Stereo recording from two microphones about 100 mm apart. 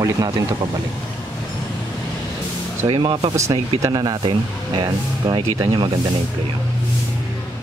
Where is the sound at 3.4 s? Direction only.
35° right (ahead or behind).